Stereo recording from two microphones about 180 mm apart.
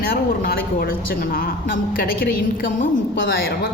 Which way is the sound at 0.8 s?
55° left (ahead or behind).